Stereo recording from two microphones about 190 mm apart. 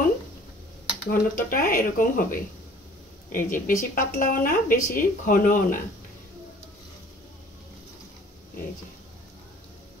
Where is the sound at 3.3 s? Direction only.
45° left (ahead or behind).